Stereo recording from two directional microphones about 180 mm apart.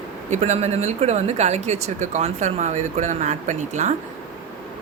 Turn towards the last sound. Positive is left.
turn(degrees=-40)  # may be behind; listen again after turning